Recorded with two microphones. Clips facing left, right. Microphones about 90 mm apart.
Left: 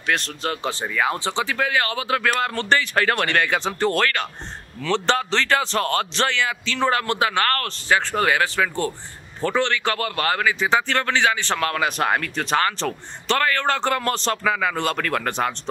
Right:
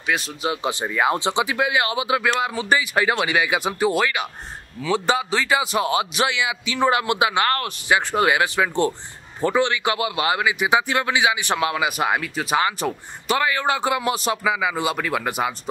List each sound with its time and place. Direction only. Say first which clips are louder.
0.0 s a man's voice: even; 5° right (ahead or behind)